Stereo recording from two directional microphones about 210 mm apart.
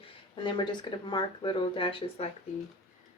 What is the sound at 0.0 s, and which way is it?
Speech, 20° left (ahead or behind).